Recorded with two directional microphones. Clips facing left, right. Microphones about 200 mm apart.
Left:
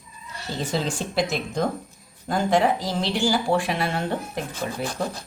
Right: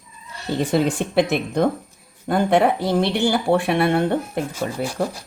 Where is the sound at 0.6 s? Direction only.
60° right (ahead or behind).